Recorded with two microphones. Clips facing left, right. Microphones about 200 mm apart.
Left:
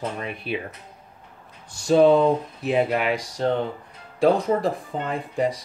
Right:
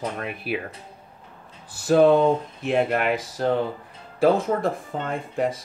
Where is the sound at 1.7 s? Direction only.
5° right (ahead or behind).